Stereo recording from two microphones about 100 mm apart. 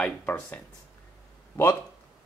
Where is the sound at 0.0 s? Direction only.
15° left (ahead or behind).